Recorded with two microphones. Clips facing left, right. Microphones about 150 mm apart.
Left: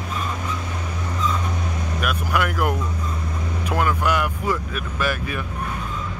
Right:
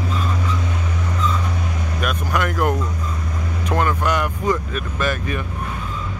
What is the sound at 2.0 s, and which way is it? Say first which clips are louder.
Vehicle: right 1 dB; 5° left (ahead or behind).